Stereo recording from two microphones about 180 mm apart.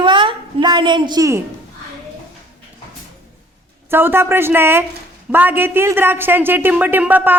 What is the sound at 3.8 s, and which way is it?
A woman's voice, 10° right (ahead or behind).